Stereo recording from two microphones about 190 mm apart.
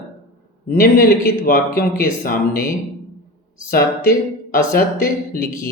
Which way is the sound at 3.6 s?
50° left (ahead or behind).